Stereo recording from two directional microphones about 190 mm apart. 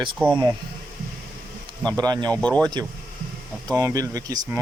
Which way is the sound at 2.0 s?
20° right (ahead or behind).